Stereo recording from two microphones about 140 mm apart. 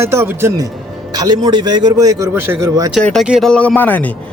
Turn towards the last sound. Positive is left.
turn(degrees=10)  # may be behind; listen again after turning